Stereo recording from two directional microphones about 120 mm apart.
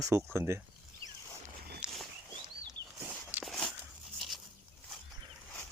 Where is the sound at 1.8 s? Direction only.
10° right (ahead or behind).